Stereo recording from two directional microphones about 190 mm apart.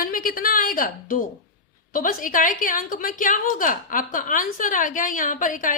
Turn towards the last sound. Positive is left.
turn(degrees=45)  # may be behind; listen again after turning